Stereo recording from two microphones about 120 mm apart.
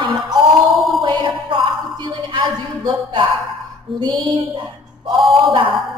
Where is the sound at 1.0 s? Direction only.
45° right (ahead or behind).